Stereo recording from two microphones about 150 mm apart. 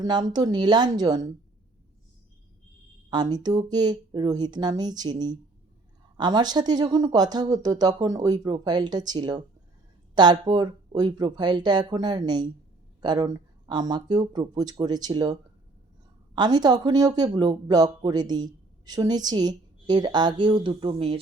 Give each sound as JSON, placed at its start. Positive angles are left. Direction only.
{"t": 0.0, "sound": "speech", "side_deg": -25}
{"t": 3.1, "sound": "speech", "side_deg": -30}